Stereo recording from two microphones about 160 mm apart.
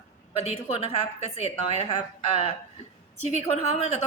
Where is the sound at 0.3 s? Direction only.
40° left (ahead or behind).